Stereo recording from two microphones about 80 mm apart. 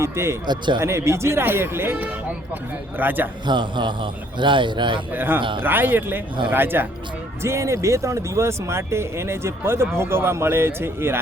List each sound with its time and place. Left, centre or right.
0.0 s speech: right
0.4 s a man's voice: right
0.8 s speech: right
3.4 s a man's voice: right
4.4 s speech: right
5.1 s speech: right
7.4 s speech: right